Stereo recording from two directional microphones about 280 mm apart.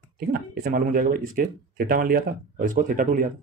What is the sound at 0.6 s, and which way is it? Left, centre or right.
Speech, right.